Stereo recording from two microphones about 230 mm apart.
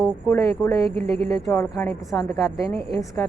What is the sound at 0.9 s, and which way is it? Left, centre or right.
Speech, right.